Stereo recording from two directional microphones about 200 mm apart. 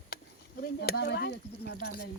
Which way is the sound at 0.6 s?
50° left (ahead or behind).